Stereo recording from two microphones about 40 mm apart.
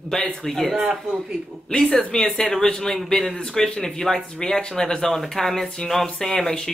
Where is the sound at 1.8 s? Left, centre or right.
Centre.